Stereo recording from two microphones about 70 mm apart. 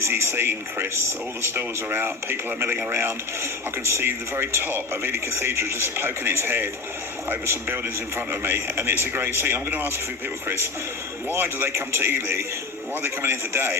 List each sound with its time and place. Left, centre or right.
0.0 s speech: right
11.3 s speech: right